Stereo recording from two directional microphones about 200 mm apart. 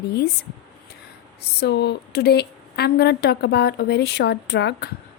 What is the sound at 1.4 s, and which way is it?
A woman's voice, 55° left (ahead or behind).